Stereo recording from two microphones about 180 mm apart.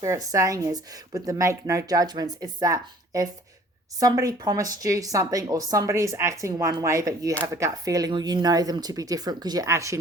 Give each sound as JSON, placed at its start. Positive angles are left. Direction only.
{"t": 0.0, "sound": "a woman's voice", "side_deg": -20}